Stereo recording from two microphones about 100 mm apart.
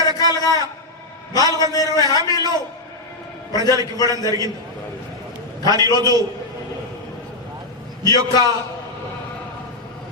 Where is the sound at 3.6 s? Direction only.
40° right (ahead or behind).